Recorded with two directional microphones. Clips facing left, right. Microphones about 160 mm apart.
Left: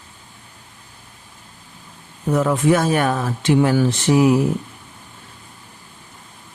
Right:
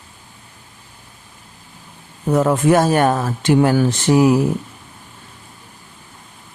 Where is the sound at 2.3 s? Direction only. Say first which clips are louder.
Right 3 dB; 45° right (ahead or behind).